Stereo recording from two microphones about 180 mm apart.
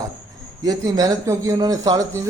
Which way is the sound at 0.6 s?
20° right (ahead or behind).